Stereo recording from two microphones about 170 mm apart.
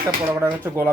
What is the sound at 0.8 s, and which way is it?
Speech, 15° right (ahead or behind).